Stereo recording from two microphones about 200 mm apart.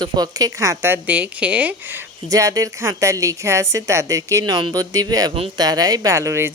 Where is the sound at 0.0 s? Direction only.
20° right (ahead or behind).